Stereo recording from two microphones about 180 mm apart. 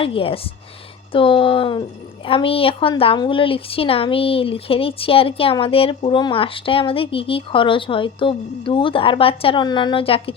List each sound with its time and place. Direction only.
0.0 s a woman's voice: 30° left (ahead or behind)